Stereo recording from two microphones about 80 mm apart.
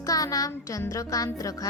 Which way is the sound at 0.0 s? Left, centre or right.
Left.